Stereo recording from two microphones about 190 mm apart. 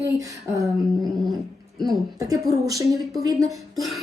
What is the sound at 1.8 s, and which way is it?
A woman's voice, 20° right (ahead or behind).